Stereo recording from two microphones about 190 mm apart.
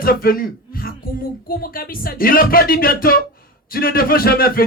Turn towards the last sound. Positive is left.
turn(degrees=50)  # may be behind; listen again after turning